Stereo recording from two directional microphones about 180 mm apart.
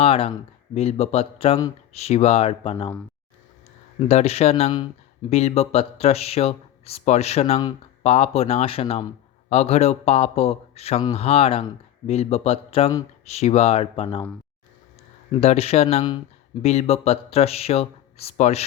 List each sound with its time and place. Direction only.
0.0 s speech: 30° left (ahead or behind)
4.1 s speech: 35° left (ahead or behind)
15.3 s speech: 35° left (ahead or behind)